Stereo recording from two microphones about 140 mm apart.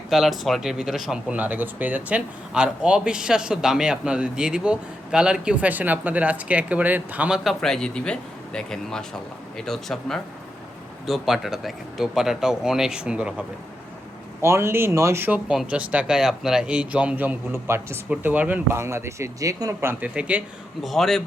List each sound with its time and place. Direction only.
0.1 s speech: centre (ahead or behind)
14.4 s speech: 20° right (ahead or behind)
20.8 s speech: centre (ahead or behind)